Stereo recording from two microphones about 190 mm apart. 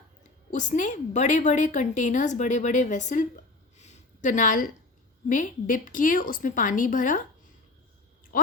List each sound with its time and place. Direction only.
0.5 s a woman's voice: 40° left (ahead or behind)
3.8 s a sound: 40° left (ahead or behind)
5.3 s a woman's voice: 45° left (ahead or behind)